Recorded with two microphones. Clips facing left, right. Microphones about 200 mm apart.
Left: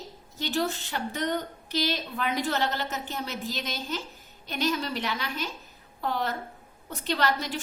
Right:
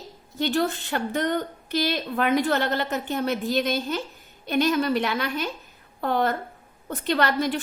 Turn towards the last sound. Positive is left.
turn(degrees=-55)  # may be behind; listen again after turning